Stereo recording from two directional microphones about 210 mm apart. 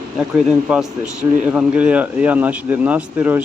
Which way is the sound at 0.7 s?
5° right (ahead or behind).